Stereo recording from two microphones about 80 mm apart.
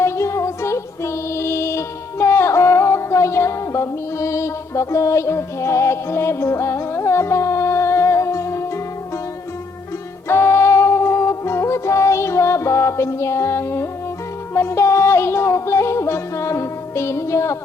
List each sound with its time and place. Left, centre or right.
0.0 s music: left
10.2 s music: left